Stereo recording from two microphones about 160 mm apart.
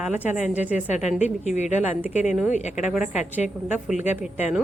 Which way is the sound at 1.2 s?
45° left (ahead or behind).